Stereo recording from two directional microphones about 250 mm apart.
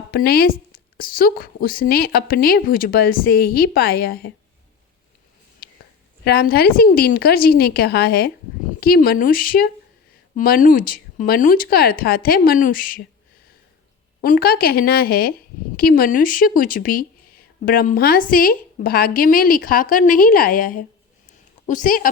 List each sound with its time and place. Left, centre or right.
0.1 s a woman's voice: left
6.2 s a woman's voice: left
14.2 s a woman's voice: left
21.2 s a sound: left